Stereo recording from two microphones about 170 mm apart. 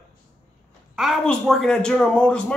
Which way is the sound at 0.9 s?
Centre (ahead or behind).